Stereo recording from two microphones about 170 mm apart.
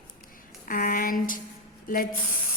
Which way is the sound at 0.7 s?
55° left (ahead or behind).